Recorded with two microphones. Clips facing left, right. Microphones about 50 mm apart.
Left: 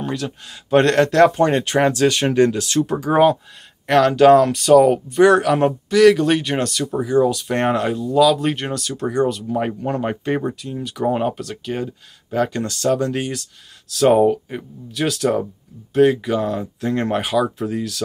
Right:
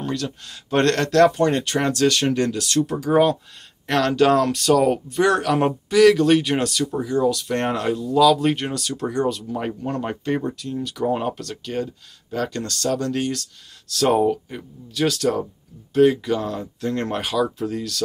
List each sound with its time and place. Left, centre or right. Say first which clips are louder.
0.0 s speech: left 1 dB; centre
3.8 s speech: left 6 dB; centre
5.6 s speech: left 2 dB; centre
6.0 s speech: left 1 dB; centre
9.5 s speech: left 4 dB; centre
15.0 s speech: left 2 dB; centre